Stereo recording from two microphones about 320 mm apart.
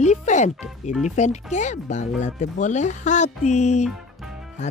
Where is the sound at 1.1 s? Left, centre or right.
Left.